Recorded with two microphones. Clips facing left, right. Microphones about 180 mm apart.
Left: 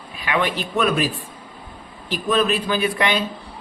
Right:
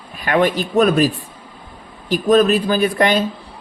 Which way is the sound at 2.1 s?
45° right (ahead or behind).